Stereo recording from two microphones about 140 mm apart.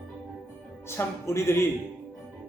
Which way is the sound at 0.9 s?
20° left (ahead or behind).